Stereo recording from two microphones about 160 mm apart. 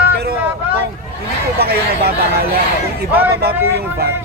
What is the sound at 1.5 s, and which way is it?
Speech, 75° right (ahead or behind).